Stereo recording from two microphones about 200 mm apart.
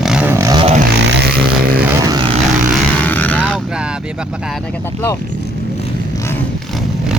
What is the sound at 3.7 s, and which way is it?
Speech, 5° right (ahead or behind).